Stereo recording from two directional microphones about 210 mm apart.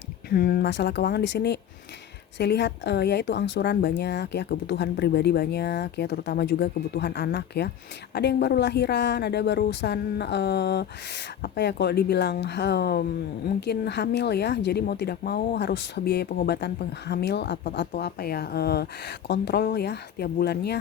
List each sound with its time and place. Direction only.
0.3 s a woman's voice: 45° left (ahead or behind)